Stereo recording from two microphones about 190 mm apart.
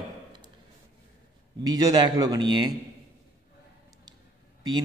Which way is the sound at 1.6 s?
20° right (ahead or behind).